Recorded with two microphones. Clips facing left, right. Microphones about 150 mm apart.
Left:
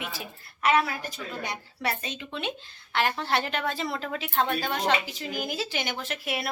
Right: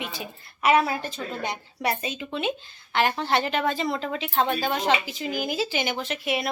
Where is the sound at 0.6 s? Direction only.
20° right (ahead or behind).